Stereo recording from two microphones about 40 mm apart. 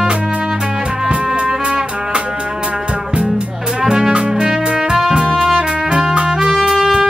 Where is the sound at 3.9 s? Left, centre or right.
Right.